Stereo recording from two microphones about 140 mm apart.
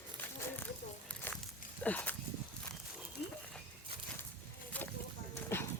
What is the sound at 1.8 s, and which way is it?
Speech, 10° left (ahead or behind).